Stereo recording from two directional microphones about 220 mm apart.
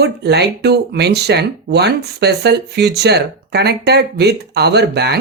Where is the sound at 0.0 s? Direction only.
50° right (ahead or behind).